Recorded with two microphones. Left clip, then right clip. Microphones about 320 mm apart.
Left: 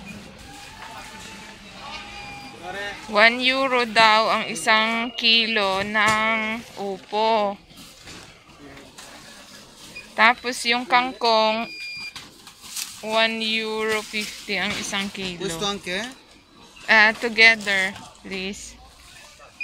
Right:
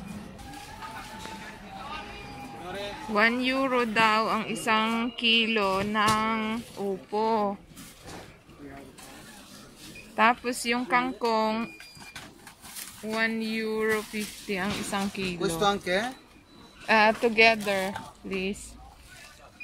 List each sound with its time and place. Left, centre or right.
3.2 s speech: centre
10.1 s speech: centre
13.1 s speech: centre
15.6 s speech: right
16.8 s speech: centre